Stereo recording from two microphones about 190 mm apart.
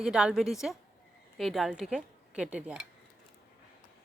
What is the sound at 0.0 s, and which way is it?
Speech, 5° right (ahead or behind).